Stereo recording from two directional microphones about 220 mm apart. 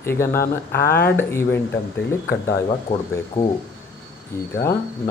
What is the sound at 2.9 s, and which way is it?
Speech, 30° left (ahead or behind).